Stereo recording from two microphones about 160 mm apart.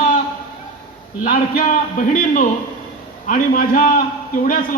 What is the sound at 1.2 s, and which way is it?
A man's voice, 55° left (ahead or behind).